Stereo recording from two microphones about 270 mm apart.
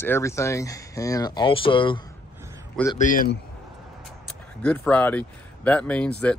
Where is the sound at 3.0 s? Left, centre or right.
Left.